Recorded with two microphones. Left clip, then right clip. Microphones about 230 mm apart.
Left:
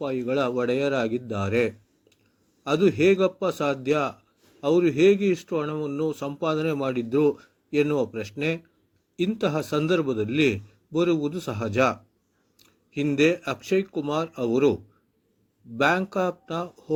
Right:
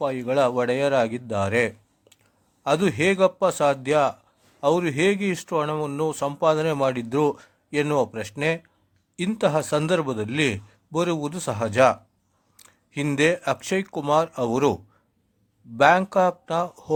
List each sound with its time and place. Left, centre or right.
0.0 s speech: right
13.0 s speech: right
15.8 s speech: right